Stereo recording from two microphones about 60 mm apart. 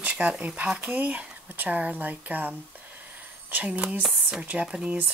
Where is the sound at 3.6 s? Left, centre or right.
Centre.